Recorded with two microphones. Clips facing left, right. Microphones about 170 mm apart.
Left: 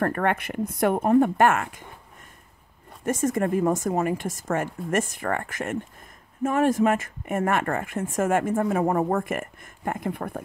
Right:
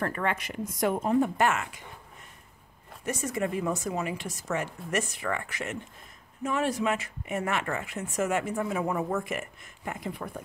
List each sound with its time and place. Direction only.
0.0 s speech: 55° left (ahead or behind)
3.1 s speech: 50° left (ahead or behind)